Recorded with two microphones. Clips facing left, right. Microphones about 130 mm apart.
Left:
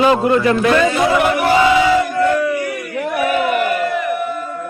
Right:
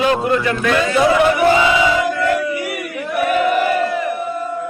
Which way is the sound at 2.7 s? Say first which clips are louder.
Even; 75° right (ahead or behind).